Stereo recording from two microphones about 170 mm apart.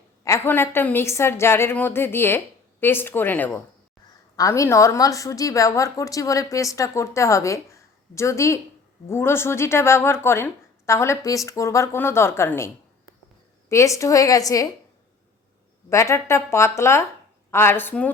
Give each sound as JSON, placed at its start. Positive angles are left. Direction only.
{"t": 0.3, "sound": "a woman's voice", "side_deg": 15}
{"t": 15.9, "sound": "speech", "side_deg": 15}